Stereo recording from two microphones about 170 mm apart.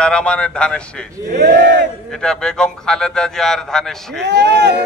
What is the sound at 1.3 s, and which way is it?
Speech, 70° right (ahead or behind).